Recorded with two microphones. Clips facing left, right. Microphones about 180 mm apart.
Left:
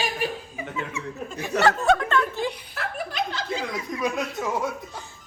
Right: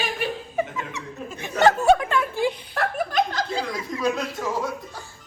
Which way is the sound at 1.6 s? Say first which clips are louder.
Right 4 dB; 15° right (ahead or behind).